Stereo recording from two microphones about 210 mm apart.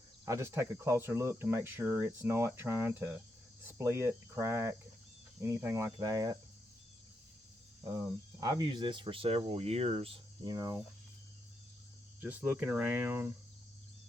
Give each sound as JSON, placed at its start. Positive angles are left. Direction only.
{"t": 0.3, "sound": "speech", "side_deg": -15}
{"t": 3.6, "sound": "cricket", "side_deg": -10}
{"t": 5.4, "sound": "speech", "side_deg": -15}
{"t": 8.4, "sound": "speech", "side_deg": -20}
{"t": 12.2, "sound": "speech", "side_deg": -5}